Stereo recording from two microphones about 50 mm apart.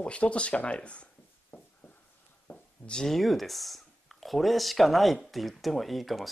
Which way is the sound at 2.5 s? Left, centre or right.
Left.